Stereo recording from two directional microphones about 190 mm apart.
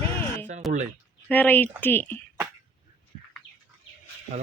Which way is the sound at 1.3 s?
10° left (ahead or behind).